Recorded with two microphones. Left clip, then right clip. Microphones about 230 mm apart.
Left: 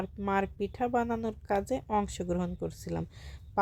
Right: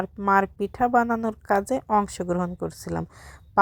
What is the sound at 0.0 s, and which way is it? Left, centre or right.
Speech, centre.